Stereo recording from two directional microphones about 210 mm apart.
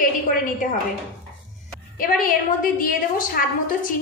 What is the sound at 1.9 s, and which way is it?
A woman's voice, 40° left (ahead or behind).